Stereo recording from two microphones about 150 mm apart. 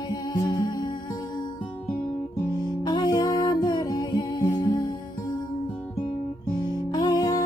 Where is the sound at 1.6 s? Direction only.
10° left (ahead or behind).